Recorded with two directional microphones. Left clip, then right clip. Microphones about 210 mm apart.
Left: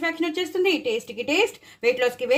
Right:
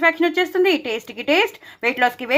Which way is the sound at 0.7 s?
45° right (ahead or behind).